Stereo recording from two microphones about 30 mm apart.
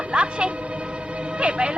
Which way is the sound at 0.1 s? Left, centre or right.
Right.